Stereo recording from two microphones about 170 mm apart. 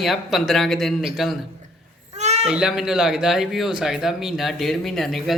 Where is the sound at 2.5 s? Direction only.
5° right (ahead or behind).